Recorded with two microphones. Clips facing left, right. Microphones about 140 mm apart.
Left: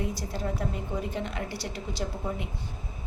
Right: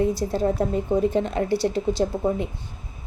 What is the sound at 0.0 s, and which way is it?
A woman's voice, 30° right (ahead or behind).